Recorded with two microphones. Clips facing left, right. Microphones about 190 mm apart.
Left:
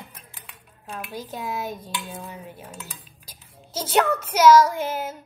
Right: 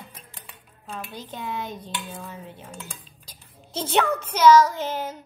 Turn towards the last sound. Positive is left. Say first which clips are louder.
# left 1 dB
turn(degrees=5)  # may be behind; listen again after turning